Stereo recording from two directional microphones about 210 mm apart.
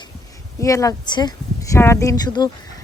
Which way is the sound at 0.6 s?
15° left (ahead or behind).